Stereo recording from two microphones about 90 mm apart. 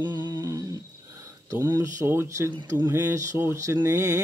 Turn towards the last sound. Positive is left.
turn(degrees=-30)  # may be behind; listen again after turning